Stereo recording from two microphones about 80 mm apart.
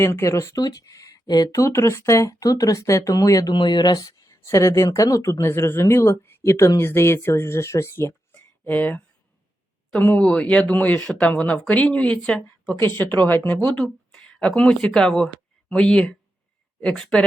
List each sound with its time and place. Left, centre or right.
0.0 s speech: left
0.6 s speech: left
1.6 s speech: left
3.5 s speech: left
4.2 s speech: left
8.6 s speech: centre
12.8 s speech: left
13.7 s speech: centre